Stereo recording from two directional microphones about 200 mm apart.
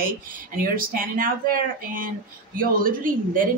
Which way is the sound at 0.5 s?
45° right (ahead or behind).